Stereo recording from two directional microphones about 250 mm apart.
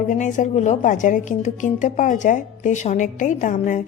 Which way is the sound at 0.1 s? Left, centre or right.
Left.